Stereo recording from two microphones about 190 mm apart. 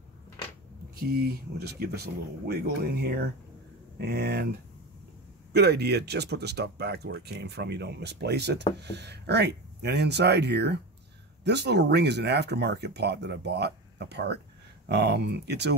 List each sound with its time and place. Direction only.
0.9 s speech: 55° right (ahead or behind)